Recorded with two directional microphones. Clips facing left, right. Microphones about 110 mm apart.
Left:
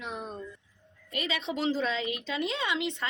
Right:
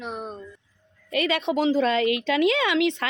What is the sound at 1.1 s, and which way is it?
A woman's voice, 65° right (ahead or behind).